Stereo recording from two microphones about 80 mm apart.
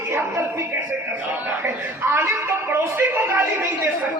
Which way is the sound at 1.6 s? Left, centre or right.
Right.